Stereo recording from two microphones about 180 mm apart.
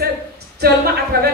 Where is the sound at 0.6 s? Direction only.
55° right (ahead or behind).